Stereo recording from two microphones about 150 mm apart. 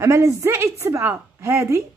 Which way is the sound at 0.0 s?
20° right (ahead or behind).